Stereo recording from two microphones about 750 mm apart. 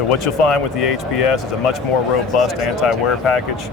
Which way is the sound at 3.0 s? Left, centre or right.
Left.